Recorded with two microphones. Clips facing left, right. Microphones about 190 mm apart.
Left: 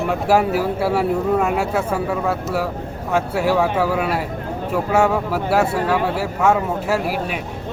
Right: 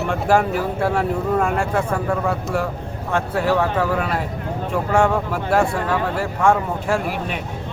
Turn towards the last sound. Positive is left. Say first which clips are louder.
# left 1 dB
turn(degrees=5)  # may be behind; listen again after turning